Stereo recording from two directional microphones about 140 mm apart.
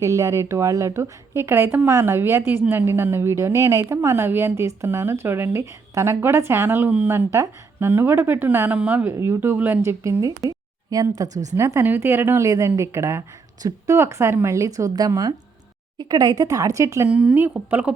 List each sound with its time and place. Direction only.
0.0 s speech: 25° right (ahead or behind)
17.1 s speech: 10° right (ahead or behind)